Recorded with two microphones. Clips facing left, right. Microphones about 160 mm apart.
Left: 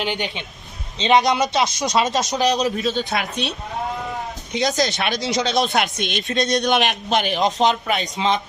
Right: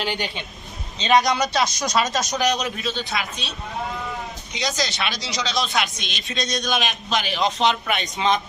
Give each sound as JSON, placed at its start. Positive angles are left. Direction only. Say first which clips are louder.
{"t": 0.0, "sound": "speech", "louder": "left 2 dB", "side_deg": 20}
{"t": 4.8, "sound": "a man's voice", "louder": "left 5 dB", "side_deg": 50}